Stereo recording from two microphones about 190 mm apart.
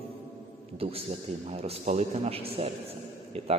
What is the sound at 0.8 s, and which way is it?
A man's voice, 30° right (ahead or behind).